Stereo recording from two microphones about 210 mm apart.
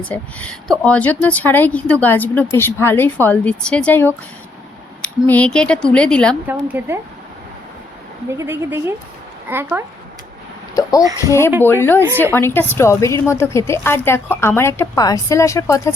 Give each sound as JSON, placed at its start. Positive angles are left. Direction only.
{"t": 0.0, "sound": "a woman's voice", "side_deg": 5}
{"t": 5.3, "sound": "a woman's voice", "side_deg": 5}
{"t": 6.5, "sound": "a woman's voice", "side_deg": -10}
{"t": 8.3, "sound": "a woman's voice", "side_deg": -10}
{"t": 10.8, "sound": "a woman's voice", "side_deg": 15}